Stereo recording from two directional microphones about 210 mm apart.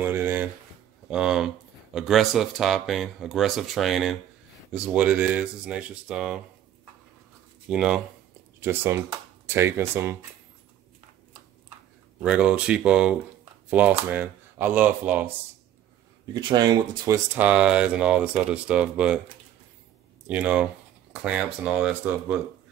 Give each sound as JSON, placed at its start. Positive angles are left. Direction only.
{"t": 0.0, "sound": "a sound", "side_deg": -10}
{"t": 2.0, "sound": "speech", "side_deg": 0}
{"t": 7.7, "sound": "speech", "side_deg": -5}
{"t": 12.2, "sound": "speech", "side_deg": -5}
{"t": 16.3, "sound": "speech", "side_deg": -20}
{"t": 17.4, "sound": "speech", "side_deg": -5}
{"t": 20.2, "sound": "speech", "side_deg": -5}